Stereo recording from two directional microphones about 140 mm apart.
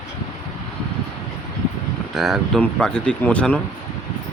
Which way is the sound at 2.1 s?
Centre (ahead or behind).